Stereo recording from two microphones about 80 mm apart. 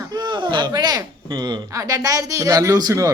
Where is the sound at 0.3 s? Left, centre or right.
Right.